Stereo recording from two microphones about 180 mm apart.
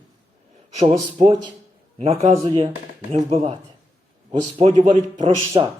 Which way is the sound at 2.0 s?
35° right (ahead or behind).